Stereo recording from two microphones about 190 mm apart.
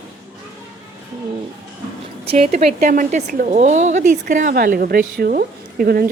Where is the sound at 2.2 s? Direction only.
30° right (ahead or behind).